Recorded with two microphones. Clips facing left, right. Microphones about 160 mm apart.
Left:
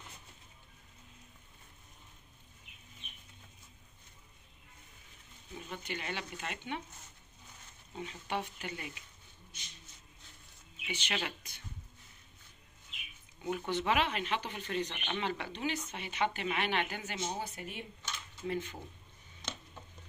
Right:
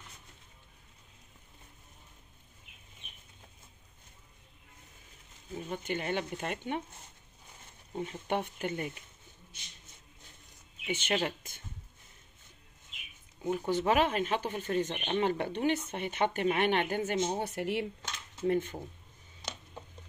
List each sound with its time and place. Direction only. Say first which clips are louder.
5.5 s speech: right 7 dB; 45° right (ahead or behind)
7.9 s speech: right 5 dB; 50° right (ahead or behind)
10.9 s speech: right 7 dB; 50° right (ahead or behind)
13.4 s speech: right 4 dB; 35° right (ahead or behind)
13.7 s speech: right 4 dB; 45° right (ahead or behind)
17.4 s speech: right 9 dB; 70° right (ahead or behind); by 18.1 s 90° right
18.5 s speech: right 7 dB; 45° right (ahead or behind)